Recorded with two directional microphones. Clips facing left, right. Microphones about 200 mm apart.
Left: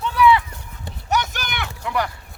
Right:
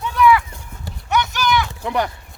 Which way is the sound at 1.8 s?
20° right (ahead or behind).